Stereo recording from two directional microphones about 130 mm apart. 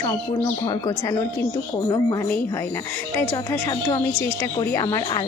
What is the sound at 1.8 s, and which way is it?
Speech, 20° left (ahead or behind).